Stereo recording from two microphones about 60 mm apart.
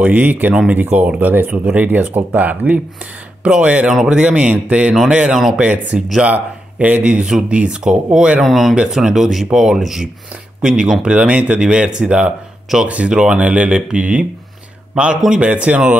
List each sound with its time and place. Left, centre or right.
0.0 s speech: right
8.4 s speech: centre; by 15.8 s right